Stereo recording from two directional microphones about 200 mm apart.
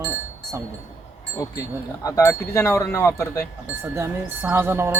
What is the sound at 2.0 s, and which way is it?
Speech, 15° left (ahead or behind).